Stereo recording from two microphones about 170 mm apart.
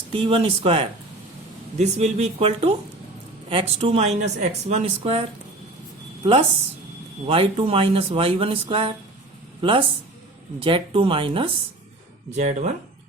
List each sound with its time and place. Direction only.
0.1 s speech: 30° right (ahead or behind)
7.3 s speech: 35° right (ahead or behind)
12.4 s speech: 40° right (ahead or behind)